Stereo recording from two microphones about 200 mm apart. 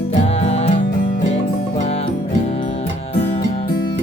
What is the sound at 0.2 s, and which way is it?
Music, 30° left (ahead or behind).